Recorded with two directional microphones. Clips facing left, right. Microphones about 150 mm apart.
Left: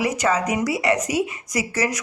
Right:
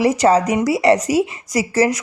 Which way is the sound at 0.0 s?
35° right (ahead or behind).